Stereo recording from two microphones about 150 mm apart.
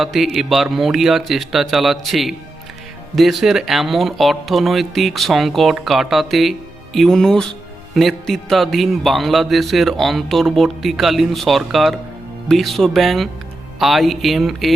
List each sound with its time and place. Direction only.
0.0 s speech: centre (ahead or behind)